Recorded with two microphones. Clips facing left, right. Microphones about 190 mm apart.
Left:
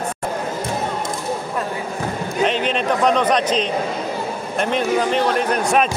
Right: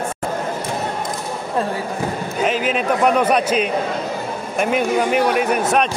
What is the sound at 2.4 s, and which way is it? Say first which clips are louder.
A man's voice: even; 5° right (ahead or behind).